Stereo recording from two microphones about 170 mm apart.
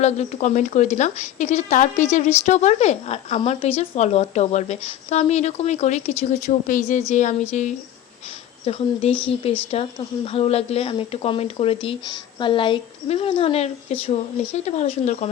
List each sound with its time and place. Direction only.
0.0 s a woman's voice: 40° left (ahead or behind)